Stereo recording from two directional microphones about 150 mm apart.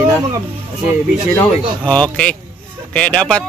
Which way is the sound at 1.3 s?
10° left (ahead or behind).